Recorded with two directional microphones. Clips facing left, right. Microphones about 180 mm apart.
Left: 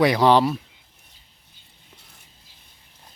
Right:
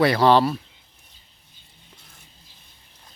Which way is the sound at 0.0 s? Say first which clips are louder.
Even; 15° left (ahead or behind).